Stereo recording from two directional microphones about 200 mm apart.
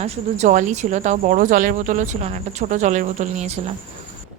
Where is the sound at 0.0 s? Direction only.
35° right (ahead or behind).